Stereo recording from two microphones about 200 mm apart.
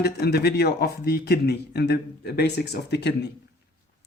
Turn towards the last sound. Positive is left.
turn(degrees=55)  # may be behind; listen again after turning